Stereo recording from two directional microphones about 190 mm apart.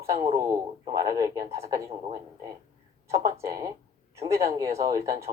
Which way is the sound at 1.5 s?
35° right (ahead or behind).